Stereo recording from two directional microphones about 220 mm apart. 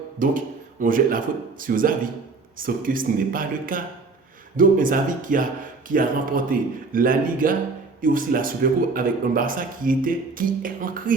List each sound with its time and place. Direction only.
0.2 s a man's voice: 35° right (ahead or behind)